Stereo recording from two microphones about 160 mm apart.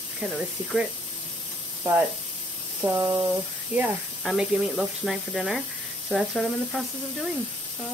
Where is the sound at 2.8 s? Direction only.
20° right (ahead or behind).